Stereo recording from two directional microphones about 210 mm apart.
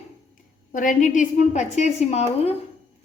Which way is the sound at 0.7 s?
40° left (ahead or behind).